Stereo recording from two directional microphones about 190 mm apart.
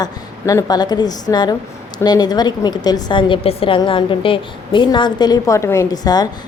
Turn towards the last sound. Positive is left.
turn(degrees=20)  # may be behind; listen again after turning